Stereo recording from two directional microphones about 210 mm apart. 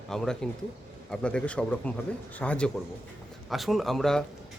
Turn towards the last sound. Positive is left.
turn(degrees=0)  # may be behind; listen again after turning